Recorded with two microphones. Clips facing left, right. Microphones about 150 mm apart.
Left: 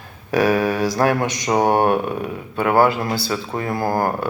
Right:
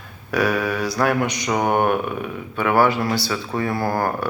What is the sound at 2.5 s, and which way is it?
A man's voice, 25° left (ahead or behind).